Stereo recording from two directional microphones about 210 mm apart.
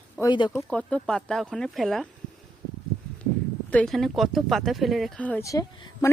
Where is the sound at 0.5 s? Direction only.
5° left (ahead or behind).